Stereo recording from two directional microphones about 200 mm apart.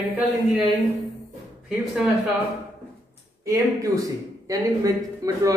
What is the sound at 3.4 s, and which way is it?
A man's voice, 15° right (ahead or behind).